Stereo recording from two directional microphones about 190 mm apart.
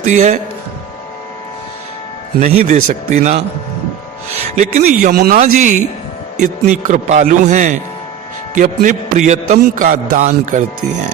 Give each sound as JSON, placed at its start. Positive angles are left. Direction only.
{"t": 0.0, "sound": "a man's voice", "side_deg": -40}
{"t": 2.4, "sound": "a man's voice", "side_deg": -40}
{"t": 4.5, "sound": "a man's voice", "side_deg": -40}
{"t": 5.1, "sound": "a man's voice", "side_deg": -50}